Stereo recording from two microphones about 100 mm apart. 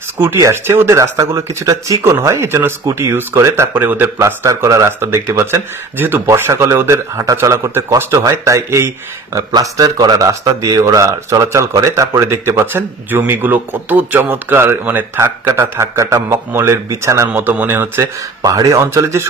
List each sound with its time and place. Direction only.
0.2 s speech: 25° right (ahead or behind)
18.4 s speech: 35° right (ahead or behind)